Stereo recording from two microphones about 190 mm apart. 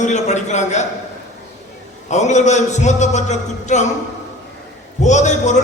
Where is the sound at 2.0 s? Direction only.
40° left (ahead or behind).